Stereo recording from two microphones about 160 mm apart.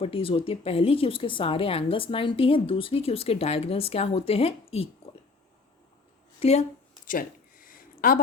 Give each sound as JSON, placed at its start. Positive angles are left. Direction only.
{"t": 0.0, "sound": "a woman's voice", "side_deg": 35}
{"t": 6.4, "sound": "speech", "side_deg": 45}
{"t": 7.1, "sound": "a sound", "side_deg": 60}